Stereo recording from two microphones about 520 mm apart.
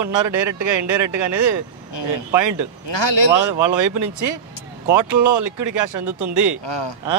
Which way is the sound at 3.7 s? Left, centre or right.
Right.